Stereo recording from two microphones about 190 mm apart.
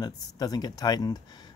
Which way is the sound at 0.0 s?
20° left (ahead or behind).